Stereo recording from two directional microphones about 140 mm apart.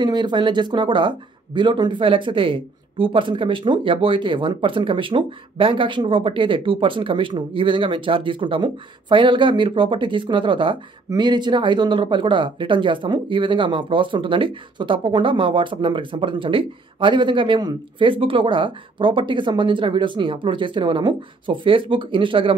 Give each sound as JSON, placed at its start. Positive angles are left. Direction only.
{"t": 0.0, "sound": "speech", "side_deg": -30}